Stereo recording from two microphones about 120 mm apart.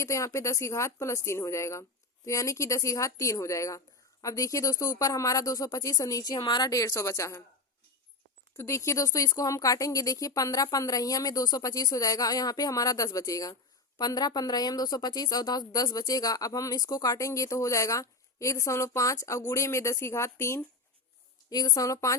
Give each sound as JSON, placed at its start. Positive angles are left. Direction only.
{"t": 0.0, "sound": "speech", "side_deg": 25}
{"t": 8.5, "sound": "speech", "side_deg": 25}
{"t": 21.5, "sound": "speech", "side_deg": 35}